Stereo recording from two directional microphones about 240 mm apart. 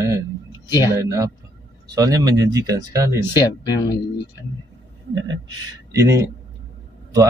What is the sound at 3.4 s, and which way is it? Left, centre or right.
Speech, centre.